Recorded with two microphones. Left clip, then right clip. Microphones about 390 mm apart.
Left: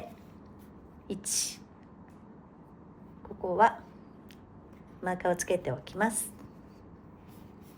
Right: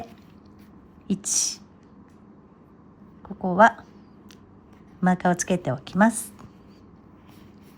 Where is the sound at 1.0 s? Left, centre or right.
Centre.